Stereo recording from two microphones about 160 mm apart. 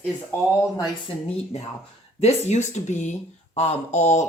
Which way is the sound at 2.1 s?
40° left (ahead or behind).